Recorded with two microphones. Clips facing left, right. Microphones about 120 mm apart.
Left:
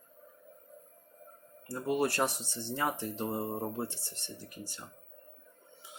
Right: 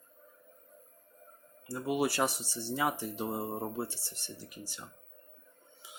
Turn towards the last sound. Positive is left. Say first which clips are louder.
# left 1 dB
turn(degrees=-5)  # may be behind; listen again after turning